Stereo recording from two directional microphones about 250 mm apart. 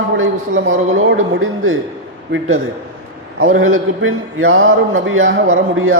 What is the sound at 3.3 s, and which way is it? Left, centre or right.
A man's voice, right.